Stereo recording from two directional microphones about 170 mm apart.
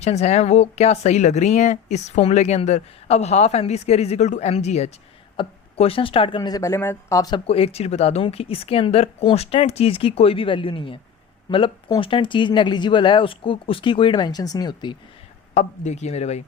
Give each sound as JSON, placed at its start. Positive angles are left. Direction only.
{"t": 0.0, "sound": "a woman's voice", "side_deg": 40}
{"t": 15.5, "sound": "a woman's voice", "side_deg": 45}